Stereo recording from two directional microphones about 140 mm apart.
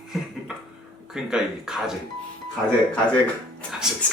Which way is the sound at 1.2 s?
5° right (ahead or behind).